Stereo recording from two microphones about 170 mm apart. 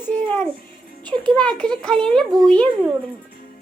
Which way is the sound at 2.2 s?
25° right (ahead or behind).